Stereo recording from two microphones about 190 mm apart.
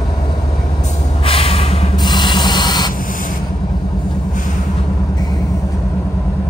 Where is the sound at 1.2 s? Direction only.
30° left (ahead or behind).